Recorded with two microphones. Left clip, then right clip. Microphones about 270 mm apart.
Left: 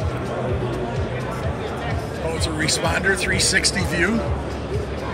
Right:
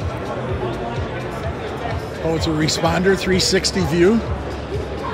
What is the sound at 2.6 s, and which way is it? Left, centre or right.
Speech, centre.